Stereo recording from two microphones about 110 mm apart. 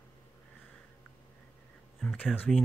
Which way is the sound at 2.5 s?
5° left (ahead or behind).